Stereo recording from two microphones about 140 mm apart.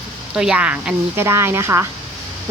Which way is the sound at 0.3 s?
5° right (ahead or behind).